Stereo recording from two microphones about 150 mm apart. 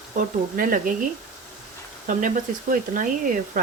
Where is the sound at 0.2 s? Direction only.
65° right (ahead or behind).